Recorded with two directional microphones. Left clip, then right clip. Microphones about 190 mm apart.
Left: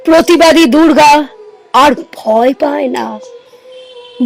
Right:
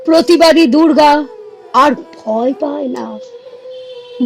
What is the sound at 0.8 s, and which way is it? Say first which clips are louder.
Speech: left 3 dB; 15° left (ahead or behind).